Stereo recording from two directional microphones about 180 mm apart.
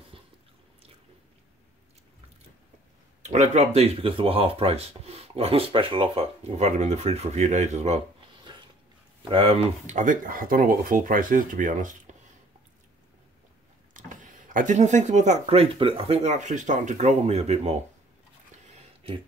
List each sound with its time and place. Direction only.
0.1 s biting: 30° right (ahead or behind)
3.3 s speech: 35° right (ahead or behind)
8.5 s a sound: 25° right (ahead or behind)
9.3 s speech: 30° right (ahead or behind)
13.9 s speech: 45° right (ahead or behind)